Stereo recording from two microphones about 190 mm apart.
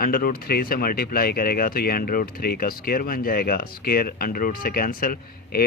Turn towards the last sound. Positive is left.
turn(degrees=50)  # may be behind; listen again after turning